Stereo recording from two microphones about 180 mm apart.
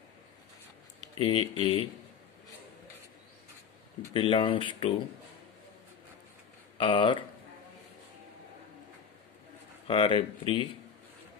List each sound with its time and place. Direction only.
1.1 s speech: 30° left (ahead or behind)
4.1 s speech: 30° left (ahead or behind)
6.8 s speech: 25° left (ahead or behind)
9.8 s speech: 30° left (ahead or behind)